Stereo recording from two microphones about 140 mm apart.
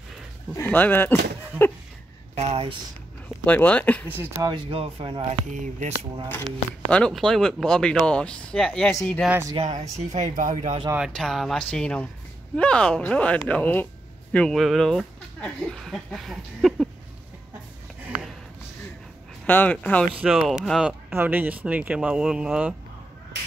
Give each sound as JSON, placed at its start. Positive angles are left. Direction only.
{"t": 0.6, "sound": "speech", "side_deg": 15}
{"t": 2.3, "sound": "speech", "side_deg": -50}
{"t": 3.4, "sound": "speech", "side_deg": 10}
{"t": 4.4, "sound": "speech", "side_deg": -35}
{"t": 5.5, "sound": "speech", "side_deg": -60}
{"t": 6.9, "sound": "speech", "side_deg": 5}
{"t": 9.6, "sound": "speech", "side_deg": -55}
{"t": 11.0, "sound": "speech", "side_deg": 0}
{"t": 19.4, "sound": "speech", "side_deg": 10}
{"t": 20.2, "sound": "speech", "side_deg": -5}
{"t": 21.1, "sound": "speech", "side_deg": -15}